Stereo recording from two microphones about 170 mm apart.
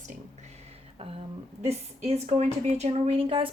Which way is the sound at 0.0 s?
40° right (ahead or behind).